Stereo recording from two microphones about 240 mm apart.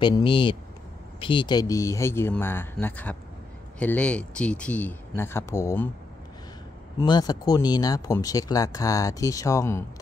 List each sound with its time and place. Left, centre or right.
0.0 s speech: centre
7.0 s speech: centre